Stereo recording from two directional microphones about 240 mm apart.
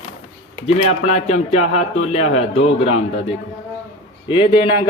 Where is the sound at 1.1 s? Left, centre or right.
Left.